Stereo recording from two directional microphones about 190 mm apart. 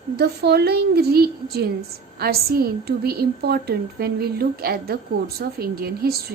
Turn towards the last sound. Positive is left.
turn(degrees=-55)  # may be behind; listen again after turning